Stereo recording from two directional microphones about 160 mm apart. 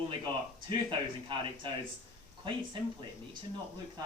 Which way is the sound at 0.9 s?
30° right (ahead or behind).